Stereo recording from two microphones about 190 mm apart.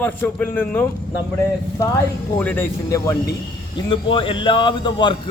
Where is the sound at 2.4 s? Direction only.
10° left (ahead or behind).